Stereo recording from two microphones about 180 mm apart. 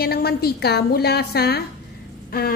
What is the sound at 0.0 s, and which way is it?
A woman's voice, 60° left (ahead or behind).